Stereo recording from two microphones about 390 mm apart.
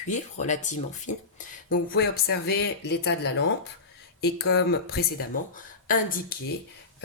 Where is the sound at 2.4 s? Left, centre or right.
Left.